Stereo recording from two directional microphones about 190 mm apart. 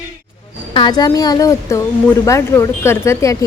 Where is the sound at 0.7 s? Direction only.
25° left (ahead or behind).